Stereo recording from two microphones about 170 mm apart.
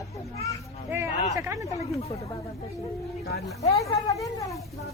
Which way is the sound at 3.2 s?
65° left (ahead or behind).